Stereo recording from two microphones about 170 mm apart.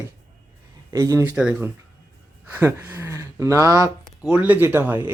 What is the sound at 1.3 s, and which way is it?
Speech, 5° right (ahead or behind).